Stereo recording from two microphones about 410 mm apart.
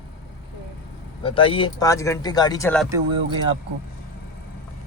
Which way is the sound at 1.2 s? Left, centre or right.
Centre.